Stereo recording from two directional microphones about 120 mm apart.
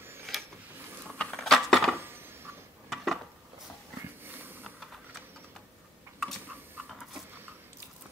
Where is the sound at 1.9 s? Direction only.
20° right (ahead or behind).